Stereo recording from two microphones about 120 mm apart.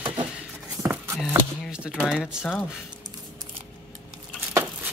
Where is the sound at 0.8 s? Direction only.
20° right (ahead or behind).